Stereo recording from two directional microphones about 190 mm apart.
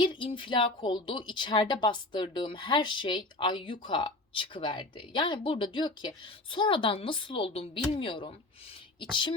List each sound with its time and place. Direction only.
0.0 s speech: 25° left (ahead or behind)